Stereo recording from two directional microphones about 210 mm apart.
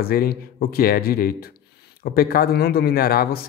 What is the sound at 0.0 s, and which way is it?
Speech, 45° left (ahead or behind).